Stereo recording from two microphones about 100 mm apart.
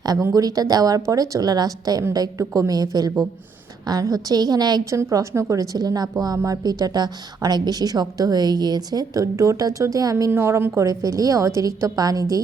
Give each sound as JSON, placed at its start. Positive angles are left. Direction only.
{"t": 0.0, "sound": "a woman's voice", "side_deg": -35}
{"t": 4.9, "sound": "a woman's voice", "side_deg": -30}